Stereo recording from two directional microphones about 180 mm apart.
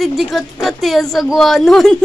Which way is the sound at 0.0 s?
Centre (ahead or behind).